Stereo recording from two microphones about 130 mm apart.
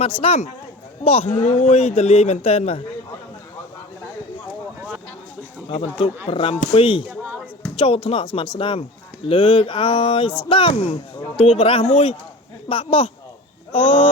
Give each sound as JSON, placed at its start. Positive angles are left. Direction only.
{"t": 0.2, "sound": "a man's voice", "side_deg": 50}
{"t": 5.6, "sound": "speech", "side_deg": 40}
{"t": 7.0, "sound": "a sound", "side_deg": -15}
{"t": 7.8, "sound": "a man's voice", "side_deg": 45}